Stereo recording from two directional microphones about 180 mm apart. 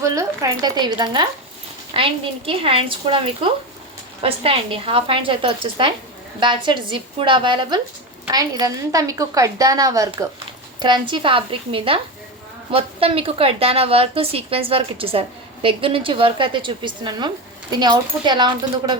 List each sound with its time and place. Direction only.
0.0 s a woman's voice: 20° right (ahead or behind)
2.5 s a woman's voice: 30° right (ahead or behind)